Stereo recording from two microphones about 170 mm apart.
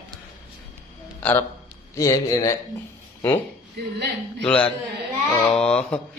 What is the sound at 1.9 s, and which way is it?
Speech, 20° left (ahead or behind).